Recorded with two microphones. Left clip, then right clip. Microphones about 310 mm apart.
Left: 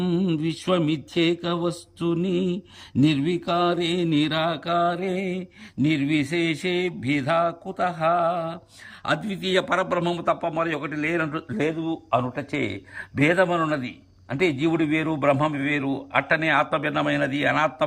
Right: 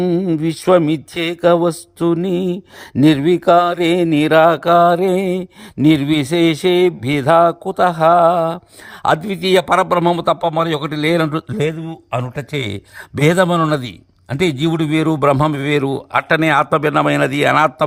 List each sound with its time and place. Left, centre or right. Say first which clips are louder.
0.0 s mantra: right 8 dB; centre
9.0 s a man's voice: right 10 dB; centre